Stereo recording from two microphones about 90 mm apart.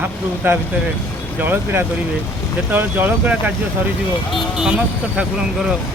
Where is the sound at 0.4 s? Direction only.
25° right (ahead or behind).